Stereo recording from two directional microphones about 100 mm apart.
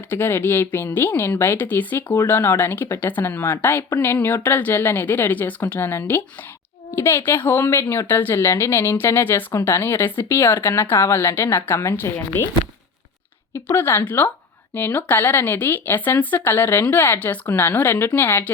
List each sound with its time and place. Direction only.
0.1 s speech: 20° left (ahead or behind)
13.5 s speech: 25° left (ahead or behind)